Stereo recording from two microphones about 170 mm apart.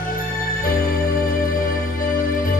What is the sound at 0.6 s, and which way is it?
Music, 60° left (ahead or behind).